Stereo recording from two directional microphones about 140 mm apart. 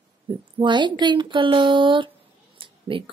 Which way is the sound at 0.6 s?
35° right (ahead or behind).